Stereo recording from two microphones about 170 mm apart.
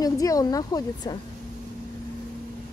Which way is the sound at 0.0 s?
20° left (ahead or behind).